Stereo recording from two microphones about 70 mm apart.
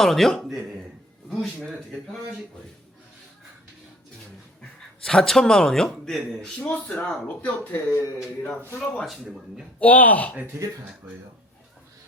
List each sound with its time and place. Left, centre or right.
0.0 s speech: centre
1.9 s speech: centre
5.0 s speech: centre
6.6 s speech: left
9.0 s speech: centre
9.8 s speech: left
11.0 s speech: right